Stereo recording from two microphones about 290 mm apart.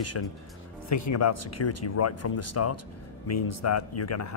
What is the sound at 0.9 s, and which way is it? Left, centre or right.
Speech, left.